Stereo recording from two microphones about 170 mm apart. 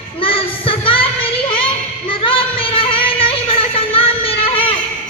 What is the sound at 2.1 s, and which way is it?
Music, 30° left (ahead or behind).